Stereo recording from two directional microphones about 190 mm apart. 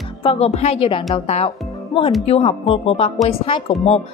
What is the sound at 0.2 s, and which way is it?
A woman's voice, 30° left (ahead or behind).